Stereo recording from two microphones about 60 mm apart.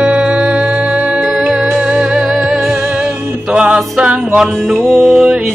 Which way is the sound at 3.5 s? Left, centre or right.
Centre.